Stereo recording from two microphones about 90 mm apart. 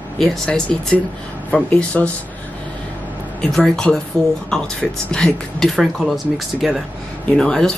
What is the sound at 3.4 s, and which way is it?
Speech, 5° left (ahead or behind).